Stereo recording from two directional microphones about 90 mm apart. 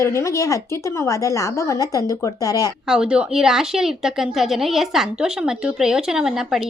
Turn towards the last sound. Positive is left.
turn(degrees=-5)  # may be behind; listen again after turning